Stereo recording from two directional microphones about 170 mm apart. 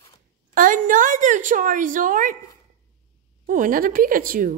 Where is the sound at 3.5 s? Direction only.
55° right (ahead or behind).